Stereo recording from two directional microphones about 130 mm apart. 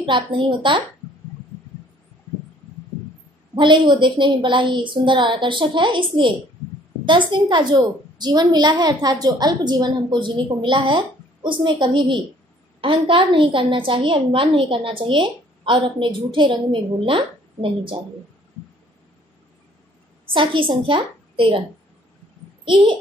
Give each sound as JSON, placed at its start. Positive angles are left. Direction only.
{"t": 0.0, "sound": "a woman's voice", "side_deg": -40}
{"t": 3.5, "sound": "a woman's voice", "side_deg": -40}
{"t": 20.3, "sound": "a woman's voice", "side_deg": -40}